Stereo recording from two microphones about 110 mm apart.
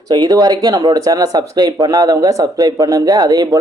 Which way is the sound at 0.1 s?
40° right (ahead or behind).